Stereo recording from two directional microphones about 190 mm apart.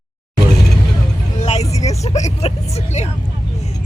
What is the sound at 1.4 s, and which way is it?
Vehicle, 35° left (ahead or behind).